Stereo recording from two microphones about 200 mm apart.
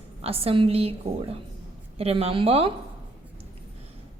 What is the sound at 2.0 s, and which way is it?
Speech, 30° right (ahead or behind).